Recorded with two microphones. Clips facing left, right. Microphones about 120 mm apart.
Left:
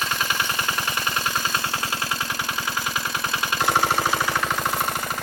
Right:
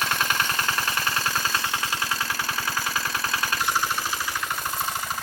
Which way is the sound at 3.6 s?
65° left (ahead or behind).